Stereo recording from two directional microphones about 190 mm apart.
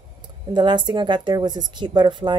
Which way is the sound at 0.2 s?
25° right (ahead or behind).